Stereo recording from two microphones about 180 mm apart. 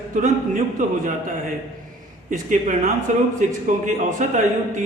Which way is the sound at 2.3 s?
45° right (ahead or behind).